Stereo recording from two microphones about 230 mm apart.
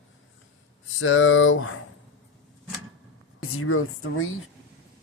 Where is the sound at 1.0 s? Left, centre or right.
Left.